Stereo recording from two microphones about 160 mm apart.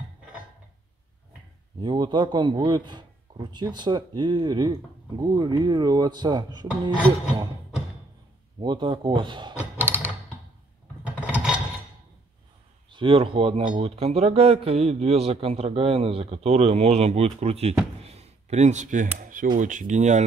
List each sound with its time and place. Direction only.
1.8 s a man's voice: 30° right (ahead or behind)
8.5 s a man's voice: 30° right (ahead or behind)
9.6 s a sound: 15° right (ahead or behind)
11.2 s mechanisms: 10° right (ahead or behind)
12.9 s speech: 35° right (ahead or behind)
18.0 s a sound: 40° right (ahead or behind)
19.1 s speech: 60° right (ahead or behind)